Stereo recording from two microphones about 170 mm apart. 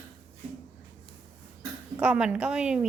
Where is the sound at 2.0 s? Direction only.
5° right (ahead or behind).